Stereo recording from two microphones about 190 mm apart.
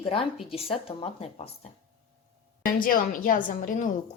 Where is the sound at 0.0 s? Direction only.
30° left (ahead or behind).